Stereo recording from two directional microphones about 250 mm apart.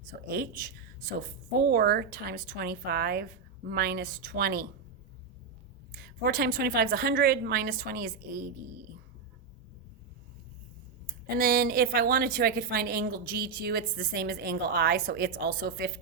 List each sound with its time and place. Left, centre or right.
0.3 s a woman's voice: right
6.2 s a woman's voice: right
11.3 s a woman's voice: right